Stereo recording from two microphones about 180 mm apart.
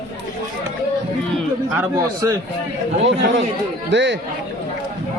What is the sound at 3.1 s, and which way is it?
A man's voice, 90° right.